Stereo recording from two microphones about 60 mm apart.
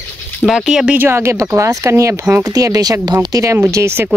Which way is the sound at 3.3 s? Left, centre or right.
Right.